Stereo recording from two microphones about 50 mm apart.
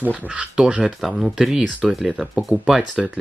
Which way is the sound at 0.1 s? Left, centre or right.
Right.